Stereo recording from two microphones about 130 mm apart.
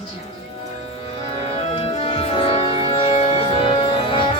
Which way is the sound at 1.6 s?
45° left (ahead or behind).